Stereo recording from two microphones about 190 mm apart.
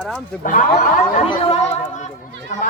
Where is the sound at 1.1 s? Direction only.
35° left (ahead or behind).